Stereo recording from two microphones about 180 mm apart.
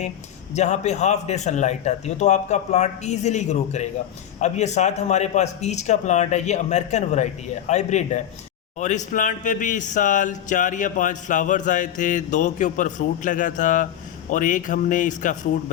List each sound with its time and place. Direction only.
0.5 s speech: 40° left (ahead or behind)